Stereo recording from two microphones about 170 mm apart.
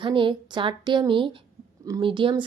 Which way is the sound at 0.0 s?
30° right (ahead or behind).